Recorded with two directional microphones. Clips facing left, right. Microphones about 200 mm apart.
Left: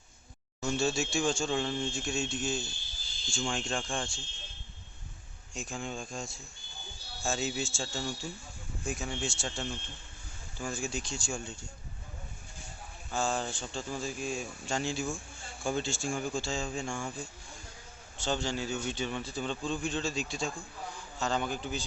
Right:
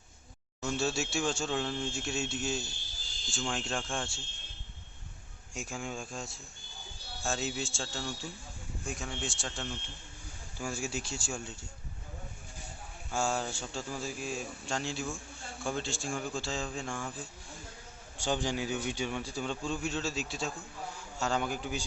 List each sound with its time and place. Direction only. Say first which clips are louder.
0.6 s speech: left 2 dB; 5° right (ahead or behind)
5.5 s a man's voice: left 1 dB; 10° right (ahead or behind)
13.1 s speech: even; 10° right (ahead or behind)
18.2 s a man's voice: right 1 dB; 15° right (ahead or behind)